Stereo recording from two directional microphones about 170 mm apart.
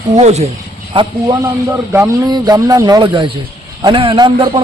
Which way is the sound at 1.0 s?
30° right (ahead or behind).